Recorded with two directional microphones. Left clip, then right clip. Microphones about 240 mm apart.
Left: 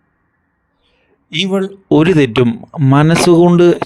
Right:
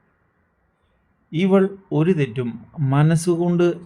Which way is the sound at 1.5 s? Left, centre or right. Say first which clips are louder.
Right 3 dB; centre.